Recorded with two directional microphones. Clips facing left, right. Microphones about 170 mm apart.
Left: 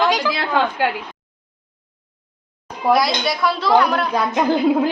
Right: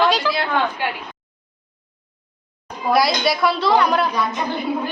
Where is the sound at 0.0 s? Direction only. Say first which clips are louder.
Even; 10° left (ahead or behind).